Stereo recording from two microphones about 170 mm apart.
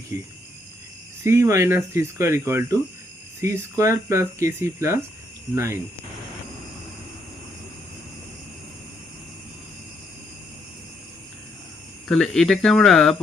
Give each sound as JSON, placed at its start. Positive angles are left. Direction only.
{"t": 1.2, "sound": "speech", "side_deg": -15}
{"t": 12.0, "sound": "speech", "side_deg": 5}